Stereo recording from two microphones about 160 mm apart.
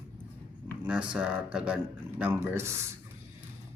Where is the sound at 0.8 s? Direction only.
5° right (ahead or behind).